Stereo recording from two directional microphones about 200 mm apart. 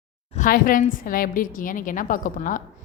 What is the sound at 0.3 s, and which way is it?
A woman's voice, 45° left (ahead or behind).